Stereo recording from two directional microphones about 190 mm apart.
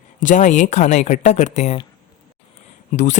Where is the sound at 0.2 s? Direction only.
40° left (ahead or behind).